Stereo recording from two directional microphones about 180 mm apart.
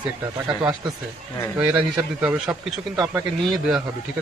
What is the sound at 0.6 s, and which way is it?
Speech, 25° right (ahead or behind).